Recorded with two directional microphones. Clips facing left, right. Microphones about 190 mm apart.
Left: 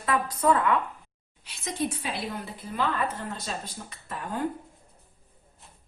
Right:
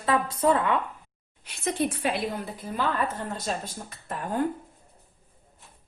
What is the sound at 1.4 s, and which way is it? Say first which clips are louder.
Speech: right 3 dB; 55° right (ahead or behind).